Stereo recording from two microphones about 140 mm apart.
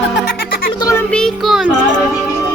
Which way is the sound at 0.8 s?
20° left (ahead or behind).